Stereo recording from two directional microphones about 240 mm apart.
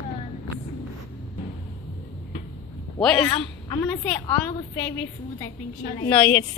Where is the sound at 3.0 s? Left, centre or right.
Centre.